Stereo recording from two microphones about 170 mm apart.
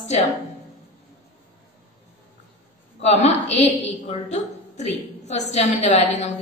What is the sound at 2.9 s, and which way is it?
A woman's voice, 40° left (ahead or behind).